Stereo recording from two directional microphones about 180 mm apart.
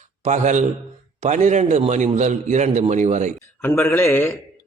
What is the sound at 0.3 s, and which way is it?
A man's voice, 40° right (ahead or behind).